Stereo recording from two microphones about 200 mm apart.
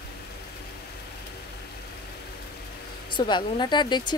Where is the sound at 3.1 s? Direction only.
25° left (ahead or behind).